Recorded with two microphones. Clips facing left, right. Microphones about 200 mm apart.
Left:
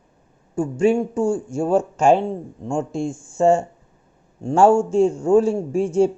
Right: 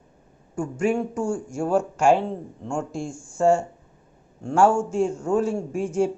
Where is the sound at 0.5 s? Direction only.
25° left (ahead or behind).